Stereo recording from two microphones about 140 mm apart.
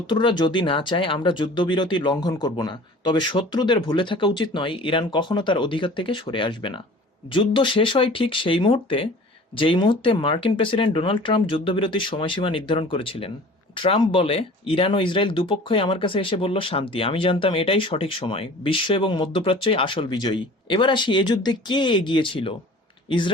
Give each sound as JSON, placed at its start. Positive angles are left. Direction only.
{"t": 0.1, "sound": "speech", "side_deg": 35}